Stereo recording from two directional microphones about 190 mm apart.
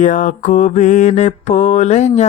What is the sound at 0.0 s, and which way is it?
Mantra, 40° left (ahead or behind).